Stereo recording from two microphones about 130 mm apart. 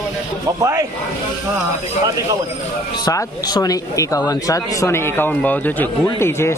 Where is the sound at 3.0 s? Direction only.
30° left (ahead or behind).